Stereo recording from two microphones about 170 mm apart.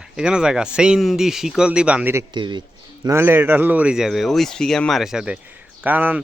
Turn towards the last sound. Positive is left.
turn(degrees=-10)  # may be behind; listen again after turning